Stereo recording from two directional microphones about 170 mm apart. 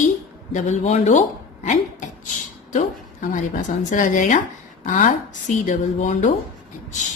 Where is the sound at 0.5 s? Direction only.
45° left (ahead or behind).